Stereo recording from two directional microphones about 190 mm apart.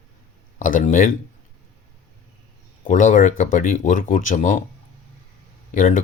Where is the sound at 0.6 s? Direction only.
45° left (ahead or behind).